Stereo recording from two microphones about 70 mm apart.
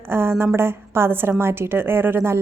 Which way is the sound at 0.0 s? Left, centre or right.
Right.